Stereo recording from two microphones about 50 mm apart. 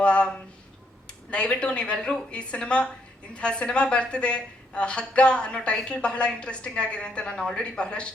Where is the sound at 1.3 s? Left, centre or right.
Left.